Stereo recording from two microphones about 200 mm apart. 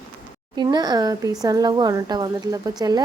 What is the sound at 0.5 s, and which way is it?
Speech, 20° right (ahead or behind).